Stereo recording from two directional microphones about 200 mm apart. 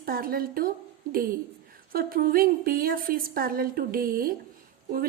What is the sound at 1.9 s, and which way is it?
A woman's voice, 45° right (ahead or behind).